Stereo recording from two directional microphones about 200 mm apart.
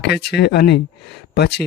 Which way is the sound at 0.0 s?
55° left (ahead or behind).